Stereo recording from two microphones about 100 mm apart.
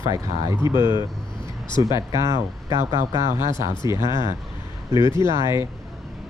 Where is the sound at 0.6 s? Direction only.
50° left (ahead or behind).